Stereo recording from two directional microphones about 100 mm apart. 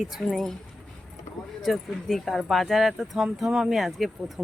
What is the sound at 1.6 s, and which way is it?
Speech, centre (ahead or behind).